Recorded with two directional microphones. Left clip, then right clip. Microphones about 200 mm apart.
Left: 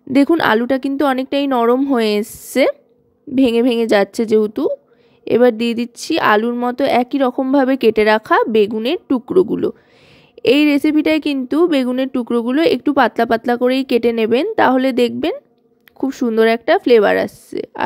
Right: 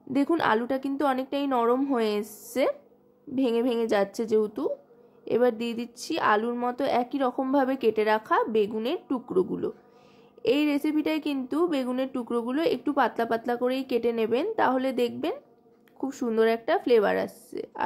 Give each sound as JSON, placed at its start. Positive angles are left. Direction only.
{"t": 0.1, "sound": "a woman's voice", "side_deg": 40}